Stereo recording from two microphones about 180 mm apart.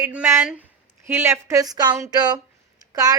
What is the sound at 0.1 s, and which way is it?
A woman's voice, 10° right (ahead or behind).